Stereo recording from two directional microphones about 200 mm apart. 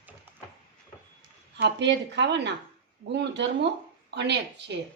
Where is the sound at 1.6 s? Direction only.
60° right (ahead or behind).